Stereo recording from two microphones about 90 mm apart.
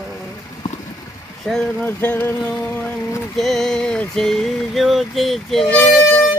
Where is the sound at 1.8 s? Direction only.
20° left (ahead or behind).